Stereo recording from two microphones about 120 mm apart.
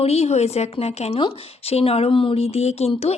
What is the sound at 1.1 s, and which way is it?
Speech, 50° left (ahead or behind).